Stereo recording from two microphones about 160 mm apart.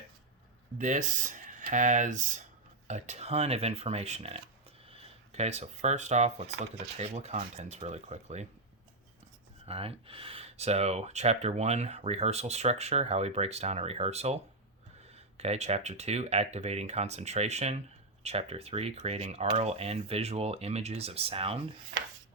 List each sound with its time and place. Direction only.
0.8 s speech: 50° right (ahead or behind)
9.6 s speech: 35° right (ahead or behind)
15.4 s speech: 40° right (ahead or behind)